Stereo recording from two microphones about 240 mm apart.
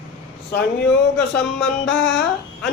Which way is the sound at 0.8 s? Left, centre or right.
Centre.